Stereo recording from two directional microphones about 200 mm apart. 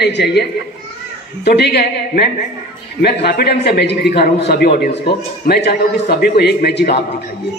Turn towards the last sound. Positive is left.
turn(degrees=50)  # may be behind; listen again after turning